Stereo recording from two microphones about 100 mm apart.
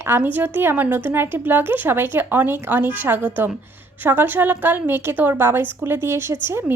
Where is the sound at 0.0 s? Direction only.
20° right (ahead or behind).